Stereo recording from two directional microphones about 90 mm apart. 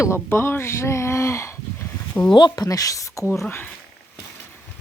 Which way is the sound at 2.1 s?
20° left (ahead or behind).